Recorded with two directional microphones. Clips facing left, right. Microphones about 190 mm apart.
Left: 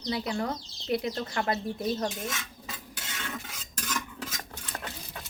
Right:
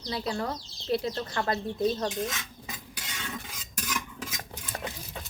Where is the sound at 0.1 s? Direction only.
20° left (ahead or behind).